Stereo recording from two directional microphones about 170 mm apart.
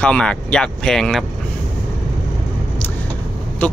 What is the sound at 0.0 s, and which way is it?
Speech, 5° left (ahead or behind).